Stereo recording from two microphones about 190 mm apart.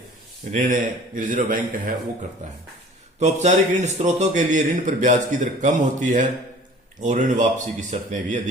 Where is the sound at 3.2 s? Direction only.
35° right (ahead or behind).